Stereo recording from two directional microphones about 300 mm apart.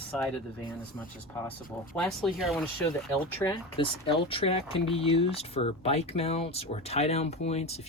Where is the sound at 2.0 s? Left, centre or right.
Centre.